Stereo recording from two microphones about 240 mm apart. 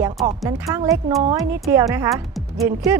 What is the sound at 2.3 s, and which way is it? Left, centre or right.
Music, centre.